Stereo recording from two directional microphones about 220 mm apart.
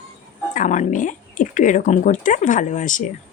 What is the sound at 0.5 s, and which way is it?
A woman's voice, 35° left (ahead or behind).